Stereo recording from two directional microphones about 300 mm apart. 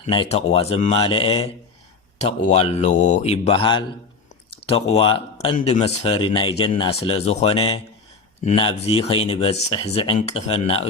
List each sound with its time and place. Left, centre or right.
0.0 s speech: centre
2.5 s speech: left